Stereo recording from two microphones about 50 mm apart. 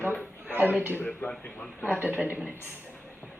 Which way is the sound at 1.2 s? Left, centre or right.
Left.